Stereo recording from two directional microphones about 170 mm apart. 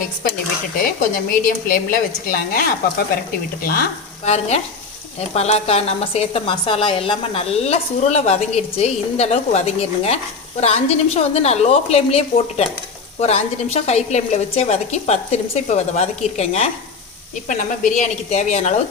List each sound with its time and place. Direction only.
1.1 s a woman's voice: 55° left (ahead or behind)
4.3 s a woman's voice: 40° left (ahead or behind)